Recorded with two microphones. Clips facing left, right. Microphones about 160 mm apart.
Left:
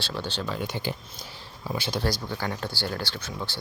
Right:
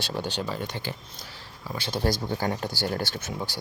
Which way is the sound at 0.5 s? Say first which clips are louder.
Left 2 dB; 5° left (ahead or behind).